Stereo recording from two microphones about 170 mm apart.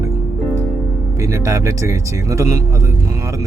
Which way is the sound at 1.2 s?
20° right (ahead or behind).